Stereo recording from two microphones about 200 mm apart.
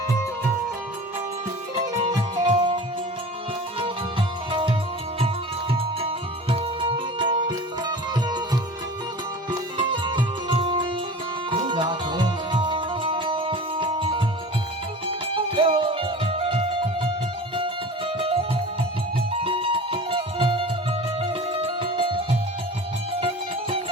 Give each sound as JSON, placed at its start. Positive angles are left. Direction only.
{"t": 2.4, "sound": "music", "side_deg": -25}
{"t": 5.7, "sound": "music", "side_deg": -25}
{"t": 9.5, "sound": "music", "side_deg": -25}